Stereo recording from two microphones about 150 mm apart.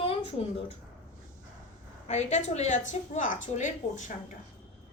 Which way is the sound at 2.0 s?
50° left (ahead or behind).